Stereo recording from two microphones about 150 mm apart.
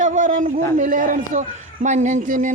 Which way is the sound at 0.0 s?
55° right (ahead or behind).